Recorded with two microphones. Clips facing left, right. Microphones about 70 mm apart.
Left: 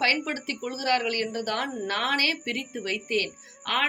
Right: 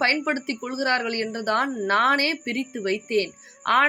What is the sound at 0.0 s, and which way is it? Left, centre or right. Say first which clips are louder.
A woman's voice: right 4 dB; right.